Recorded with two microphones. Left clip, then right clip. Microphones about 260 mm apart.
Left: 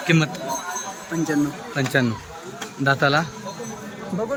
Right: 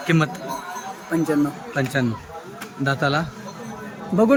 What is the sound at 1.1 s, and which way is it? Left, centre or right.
Speech, right.